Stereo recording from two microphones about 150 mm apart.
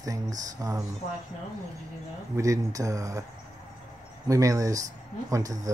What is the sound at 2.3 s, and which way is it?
Speech, 20° right (ahead or behind).